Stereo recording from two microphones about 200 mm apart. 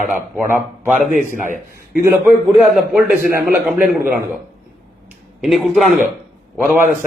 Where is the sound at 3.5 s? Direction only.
5° right (ahead or behind).